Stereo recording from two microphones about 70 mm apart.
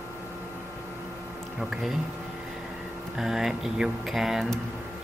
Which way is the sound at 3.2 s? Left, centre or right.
Centre.